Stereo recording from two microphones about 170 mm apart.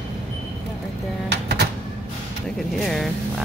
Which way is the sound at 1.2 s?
80° right.